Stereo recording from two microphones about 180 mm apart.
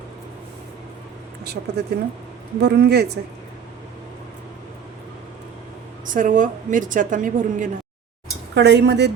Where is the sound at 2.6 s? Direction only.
65° right (ahead or behind).